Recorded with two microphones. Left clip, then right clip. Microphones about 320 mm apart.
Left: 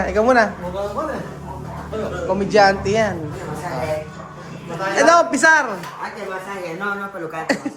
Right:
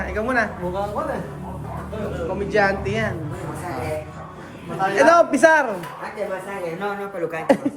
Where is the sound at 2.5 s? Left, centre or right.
Centre.